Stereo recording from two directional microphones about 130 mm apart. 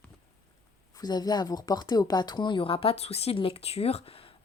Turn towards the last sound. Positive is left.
turn(degrees=50)  # may be behind; listen again after turning